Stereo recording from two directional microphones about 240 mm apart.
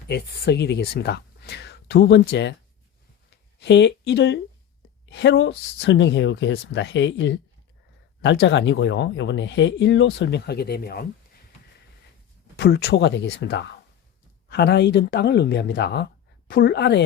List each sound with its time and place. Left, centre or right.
0.1 s speech: left
3.2 s a sound: left
5.0 s speech: left
12.5 s speech: left